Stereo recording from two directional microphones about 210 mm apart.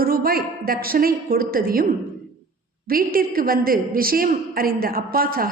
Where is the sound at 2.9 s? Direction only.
45° right (ahead or behind).